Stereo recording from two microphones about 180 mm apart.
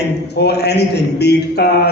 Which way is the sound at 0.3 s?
65° left (ahead or behind).